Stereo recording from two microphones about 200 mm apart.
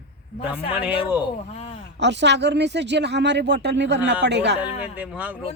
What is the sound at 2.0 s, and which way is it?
Speech, 60° right (ahead or behind).